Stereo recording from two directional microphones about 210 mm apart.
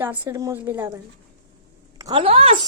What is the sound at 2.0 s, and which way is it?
Speech, 20° right (ahead or behind).